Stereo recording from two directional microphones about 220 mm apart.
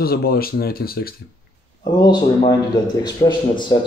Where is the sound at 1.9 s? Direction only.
20° left (ahead or behind).